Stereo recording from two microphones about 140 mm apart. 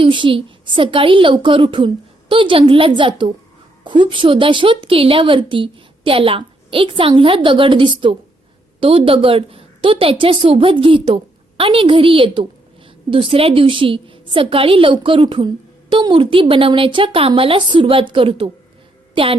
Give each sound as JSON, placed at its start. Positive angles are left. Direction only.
{"t": 0.0, "sound": "a woman's voice", "side_deg": -40}